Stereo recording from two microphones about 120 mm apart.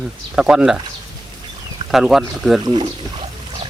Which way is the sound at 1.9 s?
Centre (ahead or behind).